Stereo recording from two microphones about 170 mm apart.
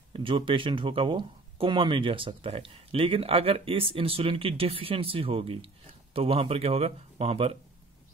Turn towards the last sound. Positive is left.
turn(degrees=-35)  # may be behind; listen again after turning